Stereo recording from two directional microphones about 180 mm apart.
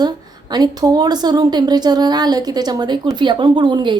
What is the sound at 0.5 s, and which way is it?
A woman's voice, 20° right (ahead or behind).